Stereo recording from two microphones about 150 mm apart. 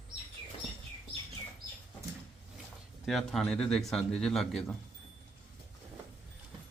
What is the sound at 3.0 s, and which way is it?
Speech, centre (ahead or behind).